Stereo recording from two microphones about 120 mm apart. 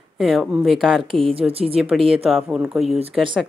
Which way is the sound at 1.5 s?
55° right (ahead or behind).